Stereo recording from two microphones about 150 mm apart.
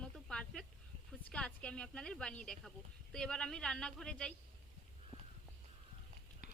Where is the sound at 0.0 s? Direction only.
5° left (ahead or behind).